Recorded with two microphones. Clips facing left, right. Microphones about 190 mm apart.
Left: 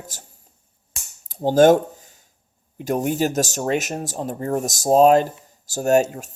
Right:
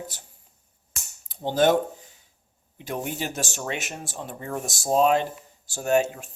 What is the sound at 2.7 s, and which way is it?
Speech, 45° left (ahead or behind).